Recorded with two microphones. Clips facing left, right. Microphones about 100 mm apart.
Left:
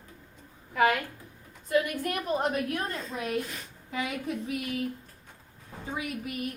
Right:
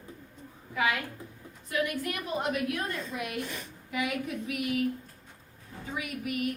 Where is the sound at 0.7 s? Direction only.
50° left (ahead or behind).